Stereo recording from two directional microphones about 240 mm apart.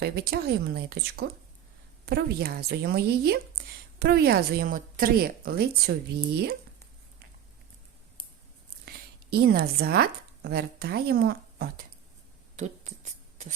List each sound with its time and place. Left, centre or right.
0.0 s a woman's voice: right
9.3 s a woman's voice: right